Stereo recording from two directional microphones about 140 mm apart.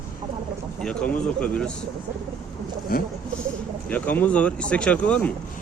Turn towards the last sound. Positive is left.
turn(degrees=10)  # may be behind; listen again after turning